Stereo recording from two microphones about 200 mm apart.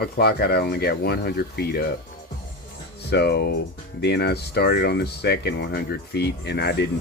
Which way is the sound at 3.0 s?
55° left (ahead or behind).